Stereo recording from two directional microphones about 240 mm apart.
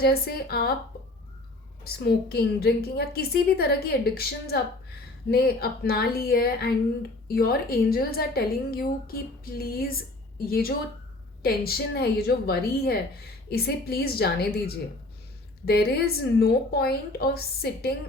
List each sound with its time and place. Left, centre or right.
0.0 s a woman's voice: left
1.8 s a woman's voice: left
15.6 s a woman's voice: left